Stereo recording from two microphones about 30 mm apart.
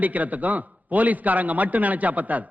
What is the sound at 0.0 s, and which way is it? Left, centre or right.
A man's voice, right.